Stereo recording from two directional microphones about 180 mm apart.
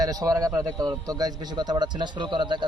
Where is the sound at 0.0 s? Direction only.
20° right (ahead or behind).